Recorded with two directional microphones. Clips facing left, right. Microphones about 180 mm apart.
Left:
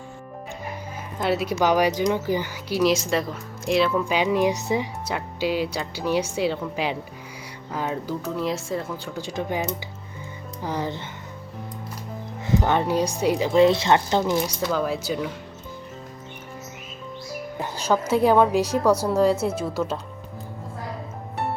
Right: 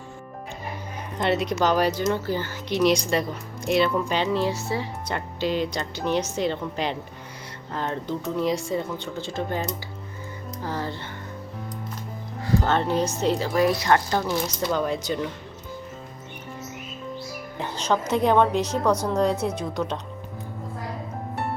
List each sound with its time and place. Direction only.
1.2 s speech: 5° left (ahead or behind)
9.2 s speech: 15° left (ahead or behind)
10.6 s speech: 15° left (ahead or behind)
12.5 s speech: 15° left (ahead or behind)
13.5 s speech: 25° left (ahead or behind)
14.7 s speech: 5° left (ahead or behind)
17.6 s speech: 10° left (ahead or behind)